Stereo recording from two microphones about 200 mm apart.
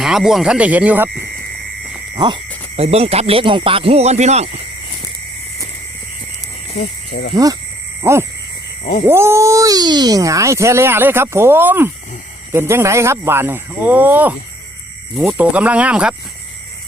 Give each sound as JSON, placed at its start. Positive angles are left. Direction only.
{"t": 0.0, "sound": "speech", "side_deg": 0}
{"t": 2.1, "sound": "owl", "side_deg": -25}
{"t": 2.7, "sound": "speech", "side_deg": -30}
{"t": 6.7, "sound": "speech", "side_deg": 55}
{"t": 8.0, "sound": "speech", "side_deg": -15}